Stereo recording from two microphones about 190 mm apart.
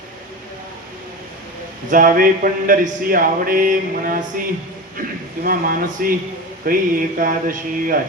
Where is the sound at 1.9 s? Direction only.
45° right (ahead or behind).